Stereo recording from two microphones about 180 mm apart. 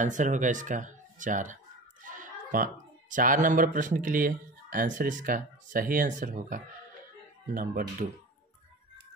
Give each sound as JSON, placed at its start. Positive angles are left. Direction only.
{"t": 0.0, "sound": "speech", "side_deg": -45}